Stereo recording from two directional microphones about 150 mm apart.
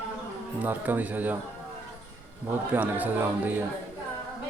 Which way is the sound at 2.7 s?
10° right (ahead or behind).